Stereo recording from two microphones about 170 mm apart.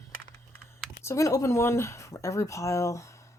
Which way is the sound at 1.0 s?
20° left (ahead or behind).